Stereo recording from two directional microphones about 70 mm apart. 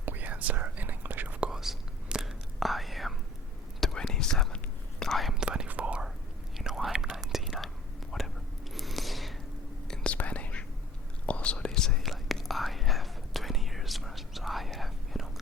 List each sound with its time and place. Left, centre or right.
0.0 s whispering: right
1.4 s whispering: centre
5.3 s whispering: centre
6.6 s whispering: centre
8.7 s a sound: centre
9.9 s whispering: centre